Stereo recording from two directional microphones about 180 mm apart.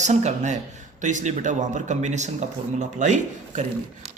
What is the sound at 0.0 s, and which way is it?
Speech, 40° right (ahead or behind).